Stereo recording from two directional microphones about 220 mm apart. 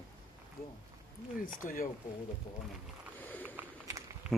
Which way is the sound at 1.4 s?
40° left (ahead or behind).